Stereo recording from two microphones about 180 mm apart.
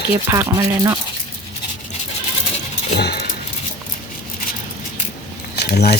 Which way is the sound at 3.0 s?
65° left (ahead or behind).